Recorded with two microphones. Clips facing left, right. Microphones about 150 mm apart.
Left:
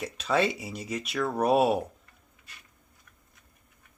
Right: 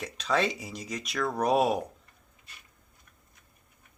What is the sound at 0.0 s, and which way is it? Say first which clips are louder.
Speech: left 2 dB; 5° left (ahead or behind).